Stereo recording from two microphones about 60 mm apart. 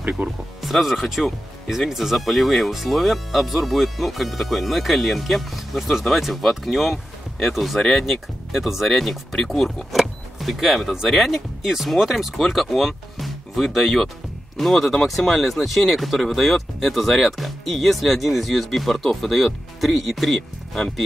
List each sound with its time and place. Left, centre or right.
0.2 s speech: right
0.6 s speech: centre